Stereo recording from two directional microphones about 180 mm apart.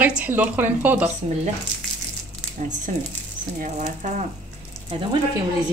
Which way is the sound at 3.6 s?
40° right (ahead or behind).